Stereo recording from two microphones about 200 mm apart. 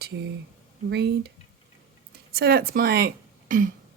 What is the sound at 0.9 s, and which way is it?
Speech, 55° right (ahead or behind).